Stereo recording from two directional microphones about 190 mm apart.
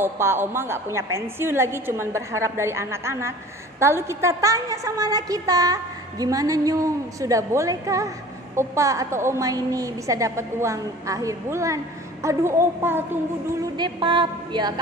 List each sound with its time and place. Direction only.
0.0 s a woman's voice: 10° right (ahead or behind)
13.7 s a woman's voice: 25° right (ahead or behind)